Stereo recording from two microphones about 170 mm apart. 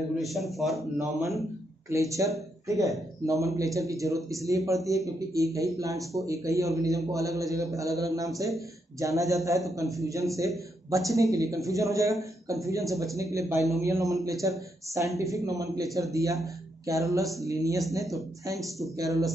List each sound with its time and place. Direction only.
0.1 s a man's voice: centre (ahead or behind)
1.9 s a man's voice: 20° right (ahead or behind)